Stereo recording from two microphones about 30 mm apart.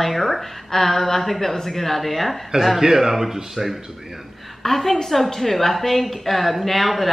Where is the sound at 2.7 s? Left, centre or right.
Centre.